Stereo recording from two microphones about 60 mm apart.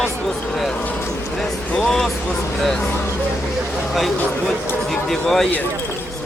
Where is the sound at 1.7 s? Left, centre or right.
Centre.